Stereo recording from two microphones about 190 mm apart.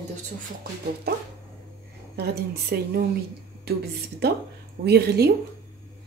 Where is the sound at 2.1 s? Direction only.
55° right (ahead or behind).